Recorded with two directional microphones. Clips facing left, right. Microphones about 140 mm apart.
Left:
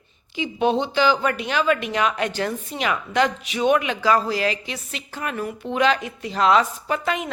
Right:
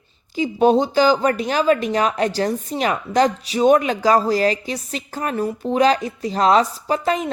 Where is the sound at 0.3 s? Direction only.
40° right (ahead or behind).